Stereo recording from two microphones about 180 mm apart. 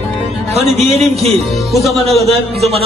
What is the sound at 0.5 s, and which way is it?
Speech, 40° right (ahead or behind).